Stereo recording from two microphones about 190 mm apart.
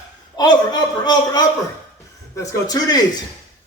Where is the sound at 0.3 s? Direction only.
20° left (ahead or behind).